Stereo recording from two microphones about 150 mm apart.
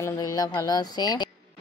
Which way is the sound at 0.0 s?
25° left (ahead or behind).